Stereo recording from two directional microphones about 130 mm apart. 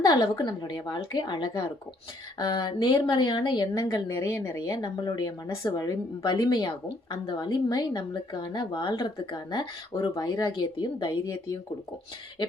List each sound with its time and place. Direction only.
0.0 s a woman's voice: 30° left (ahead or behind)
4.8 s a woman's voice: 35° left (ahead or behind)